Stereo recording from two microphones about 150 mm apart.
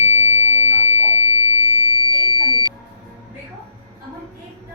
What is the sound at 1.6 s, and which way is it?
Smoke detector, 40° left (ahead or behind).